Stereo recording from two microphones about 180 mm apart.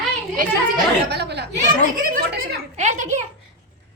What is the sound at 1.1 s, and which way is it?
A child's voice, 70° right (ahead or behind).